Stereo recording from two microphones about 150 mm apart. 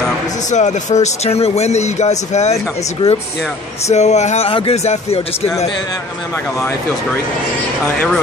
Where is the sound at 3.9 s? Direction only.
50° left (ahead or behind).